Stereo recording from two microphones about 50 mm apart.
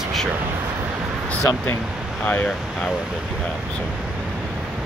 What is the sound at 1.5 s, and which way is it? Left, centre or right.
Speech, left.